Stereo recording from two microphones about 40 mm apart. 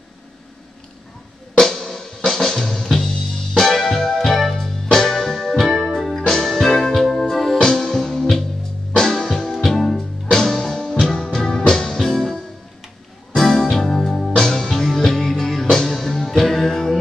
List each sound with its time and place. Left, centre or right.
1.6 s music: centre
5.7 s music: centre
5.9 s music: centre